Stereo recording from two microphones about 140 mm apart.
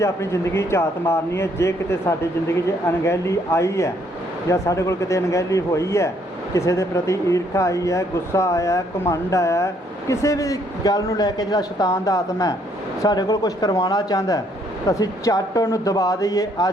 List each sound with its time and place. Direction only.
0.0 s speech: 20° left (ahead or behind)